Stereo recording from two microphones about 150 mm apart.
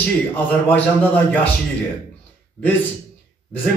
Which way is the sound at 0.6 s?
10° left (ahead or behind).